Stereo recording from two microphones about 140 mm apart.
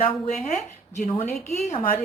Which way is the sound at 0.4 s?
60° left (ahead or behind).